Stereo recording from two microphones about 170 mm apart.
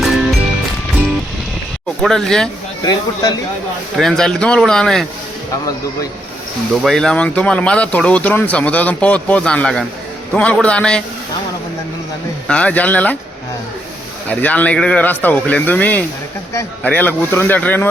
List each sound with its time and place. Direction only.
0.0 s music: centre (ahead or behind)
2.0 s speech: centre (ahead or behind)
2.8 s speech: 25° left (ahead or behind)
3.9 s speech: centre (ahead or behind)
6.8 s speech: 5° left (ahead or behind)
12.5 s speech: 5° left (ahead or behind)
14.3 s speech: 10° left (ahead or behind)